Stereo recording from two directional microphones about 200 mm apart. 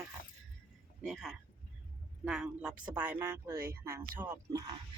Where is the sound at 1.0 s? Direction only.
Centre (ahead or behind).